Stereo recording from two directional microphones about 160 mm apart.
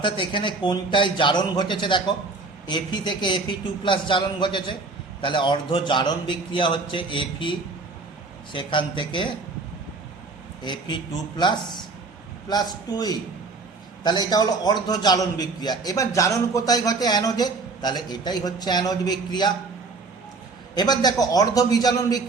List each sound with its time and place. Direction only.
0.0 s a man's voice: 30° left (ahead or behind)
8.5 s a man's voice: 30° left (ahead or behind)
10.6 s a man's voice: 30° left (ahead or behind)
20.7 s a man's voice: 25° left (ahead or behind)